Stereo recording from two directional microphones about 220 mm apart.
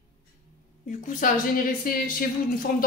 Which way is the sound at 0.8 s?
35° left (ahead or behind).